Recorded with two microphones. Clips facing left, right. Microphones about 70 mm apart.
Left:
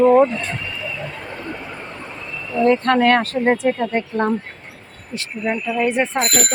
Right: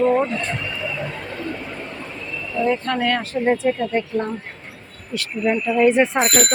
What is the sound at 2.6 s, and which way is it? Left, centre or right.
Speech, left.